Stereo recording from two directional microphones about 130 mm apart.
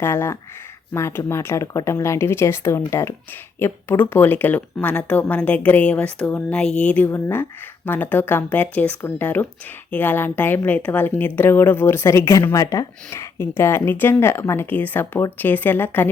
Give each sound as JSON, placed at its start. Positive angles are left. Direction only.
{"t": 0.0, "sound": "a woman's voice", "side_deg": 20}